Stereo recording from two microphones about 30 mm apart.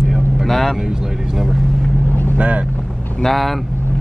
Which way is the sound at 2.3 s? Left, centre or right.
Right.